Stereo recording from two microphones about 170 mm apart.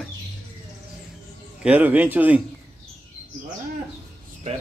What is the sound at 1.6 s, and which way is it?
Speech, 10° right (ahead or behind).